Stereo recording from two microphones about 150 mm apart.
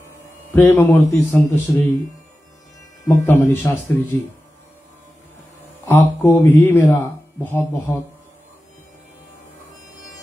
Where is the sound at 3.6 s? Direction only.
10° left (ahead or behind).